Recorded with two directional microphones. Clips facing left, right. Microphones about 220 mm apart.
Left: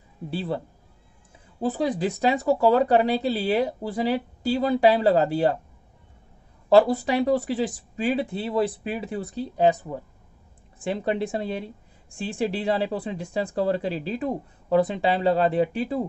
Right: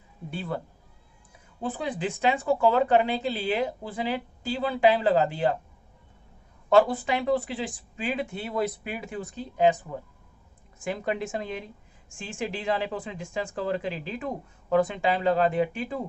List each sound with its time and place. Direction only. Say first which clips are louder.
0.3 s speech: left 4 dB; 35° left (ahead or behind)
1.6 s a woman's voice: left 6 dB; 40° left (ahead or behind)
6.7 s a woman's voice: left 3 dB; 40° left (ahead or behind)